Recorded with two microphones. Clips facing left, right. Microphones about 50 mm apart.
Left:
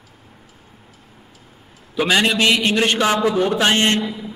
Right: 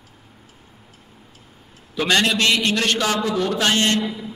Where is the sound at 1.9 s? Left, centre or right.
Centre.